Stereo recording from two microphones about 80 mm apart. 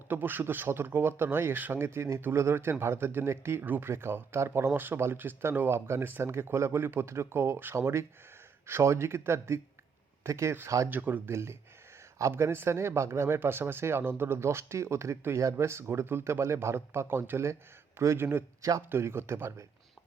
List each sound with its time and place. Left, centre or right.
0.1 s speech: right